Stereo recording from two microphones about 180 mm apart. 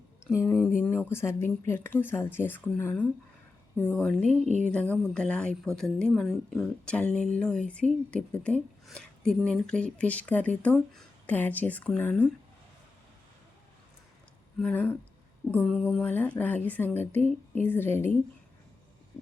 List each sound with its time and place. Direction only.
0.3 s speech: 10° left (ahead or behind)
4.4 s speech: 40° right (ahead or behind)
4.7 s speech: 5° left (ahead or behind)
14.6 s speech: 10° left (ahead or behind)